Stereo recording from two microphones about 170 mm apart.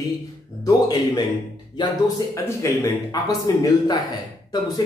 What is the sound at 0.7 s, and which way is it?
Speech, 25° left (ahead or behind).